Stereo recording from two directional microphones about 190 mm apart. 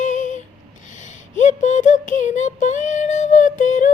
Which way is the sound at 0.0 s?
40° left (ahead or behind).